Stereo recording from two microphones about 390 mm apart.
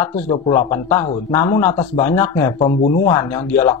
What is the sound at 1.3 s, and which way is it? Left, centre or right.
Speech, centre.